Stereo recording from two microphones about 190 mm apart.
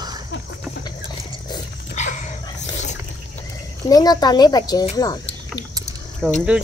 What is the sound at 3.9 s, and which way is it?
Speech, 20° left (ahead or behind).